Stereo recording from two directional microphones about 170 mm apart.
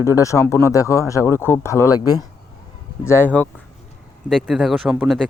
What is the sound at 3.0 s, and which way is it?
Speech, 15° left (ahead or behind).